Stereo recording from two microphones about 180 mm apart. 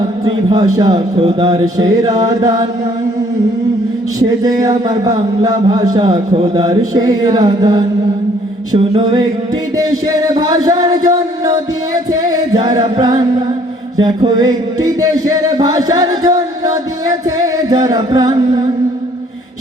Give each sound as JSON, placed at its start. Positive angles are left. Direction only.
{"t": 0.3, "sound": "a man's voice", "side_deg": -25}
{"t": 4.3, "sound": "a man's voice", "side_deg": -20}
{"t": 6.7, "sound": "a man's voice", "side_deg": -20}
{"t": 12.1, "sound": "a man's voice", "side_deg": -20}